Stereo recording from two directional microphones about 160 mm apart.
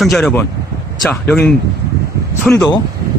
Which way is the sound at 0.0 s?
Centre (ahead or behind).